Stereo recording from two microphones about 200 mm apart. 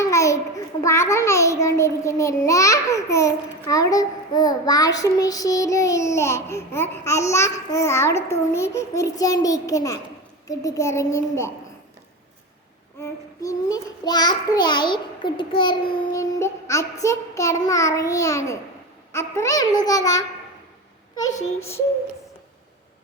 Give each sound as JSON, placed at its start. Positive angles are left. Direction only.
{"t": 0.0, "sound": "a child's voice", "side_deg": 15}
{"t": 13.0, "sound": "a child's voice", "side_deg": 15}